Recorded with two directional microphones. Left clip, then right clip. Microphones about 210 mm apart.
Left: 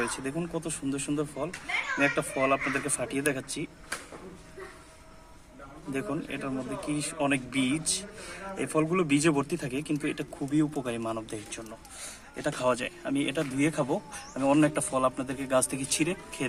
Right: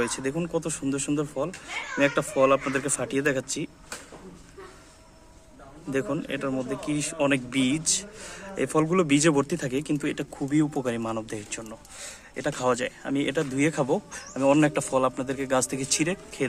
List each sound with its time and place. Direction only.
0.0 s speech: 50° right (ahead or behind)
5.9 s speech: 50° right (ahead or behind)